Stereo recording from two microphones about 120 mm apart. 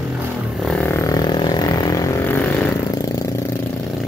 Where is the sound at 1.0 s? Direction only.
35° left (ahead or behind).